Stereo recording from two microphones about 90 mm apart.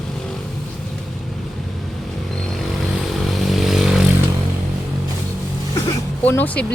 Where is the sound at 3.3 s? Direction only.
Centre (ahead or behind).